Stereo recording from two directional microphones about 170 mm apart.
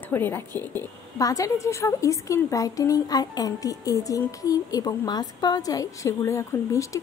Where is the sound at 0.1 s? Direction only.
10° left (ahead or behind).